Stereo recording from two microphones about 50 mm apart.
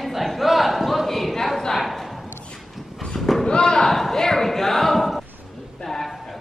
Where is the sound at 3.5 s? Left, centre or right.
Centre.